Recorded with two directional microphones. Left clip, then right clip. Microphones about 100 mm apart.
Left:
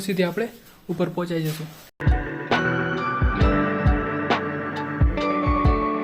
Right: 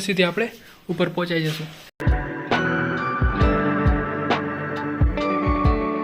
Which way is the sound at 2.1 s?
Centre (ahead or behind).